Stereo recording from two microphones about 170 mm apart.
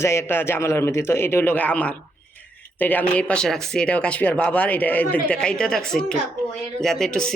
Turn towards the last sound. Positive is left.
turn(degrees=5)  # may be behind; listen again after turning